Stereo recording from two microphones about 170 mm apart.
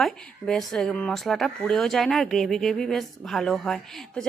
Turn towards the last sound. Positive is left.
turn(degrees=5)  # may be behind; listen again after turning